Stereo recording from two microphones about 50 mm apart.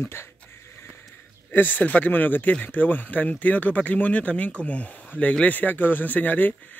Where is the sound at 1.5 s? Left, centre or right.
Left.